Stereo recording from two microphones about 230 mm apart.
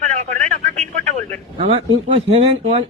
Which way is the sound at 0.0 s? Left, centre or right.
Right.